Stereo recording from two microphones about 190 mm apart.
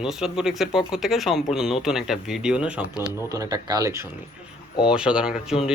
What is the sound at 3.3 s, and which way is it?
Speech, 20° right (ahead or behind).